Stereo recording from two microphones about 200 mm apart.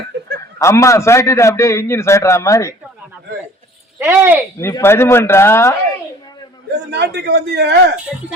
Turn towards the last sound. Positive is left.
turn(degrees=-55)  # may be behind; listen again after turning